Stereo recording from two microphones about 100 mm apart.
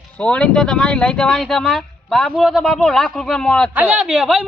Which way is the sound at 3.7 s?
15° right (ahead or behind).